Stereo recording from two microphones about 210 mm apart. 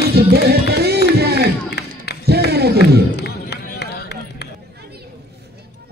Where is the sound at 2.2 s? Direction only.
50° right (ahead or behind).